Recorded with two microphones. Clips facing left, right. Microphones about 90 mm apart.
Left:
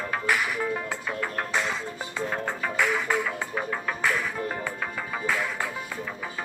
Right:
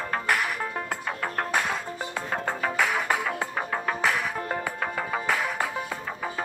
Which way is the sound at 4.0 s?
70° right (ahead or behind).